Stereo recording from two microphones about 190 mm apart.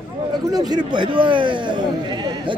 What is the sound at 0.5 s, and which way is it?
A man's voice, 20° right (ahead or behind).